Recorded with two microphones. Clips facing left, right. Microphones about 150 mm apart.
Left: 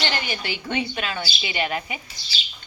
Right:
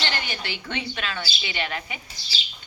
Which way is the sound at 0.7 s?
15° left (ahead or behind).